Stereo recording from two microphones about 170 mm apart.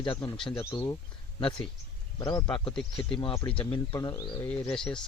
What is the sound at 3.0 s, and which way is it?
Speech, 30° left (ahead or behind).